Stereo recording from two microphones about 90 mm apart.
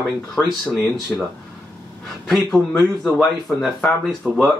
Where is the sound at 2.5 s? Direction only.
15° left (ahead or behind).